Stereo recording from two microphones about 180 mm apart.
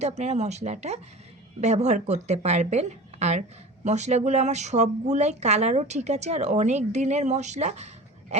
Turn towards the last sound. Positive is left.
turn(degrees=-40)  # may be behind; listen again after turning